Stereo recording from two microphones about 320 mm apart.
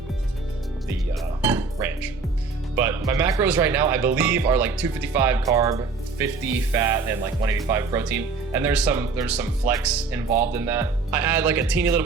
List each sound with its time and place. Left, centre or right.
1.4 s dishes: centre
2.7 s speech: centre